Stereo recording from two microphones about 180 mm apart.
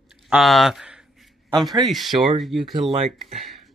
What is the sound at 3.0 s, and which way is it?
Speech, 35° right (ahead or behind).